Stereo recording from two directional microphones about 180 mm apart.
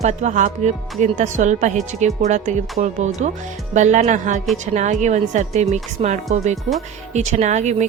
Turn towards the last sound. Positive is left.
turn(degrees=-40)  # may be behind; listen again after turning